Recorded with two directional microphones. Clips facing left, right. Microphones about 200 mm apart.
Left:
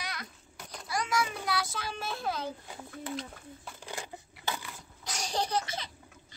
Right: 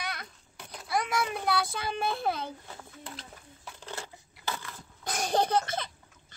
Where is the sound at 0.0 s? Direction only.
60° right (ahead or behind).